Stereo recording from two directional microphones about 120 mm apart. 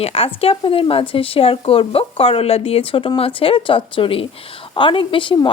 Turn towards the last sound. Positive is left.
turn(degrees=45)  # may be behind; listen again after turning